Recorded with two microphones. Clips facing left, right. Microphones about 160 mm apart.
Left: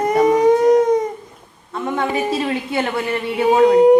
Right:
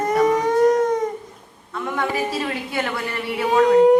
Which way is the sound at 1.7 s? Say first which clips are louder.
Left 3 dB; 30° left (ahead or behind).